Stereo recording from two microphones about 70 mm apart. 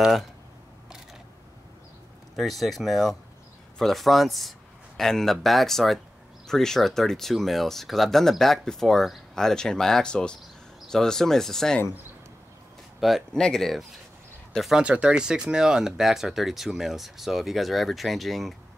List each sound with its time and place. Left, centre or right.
0.0 s speech: centre
2.3 s a man's voice: centre
13.3 s speech: centre
14.7 s speech: centre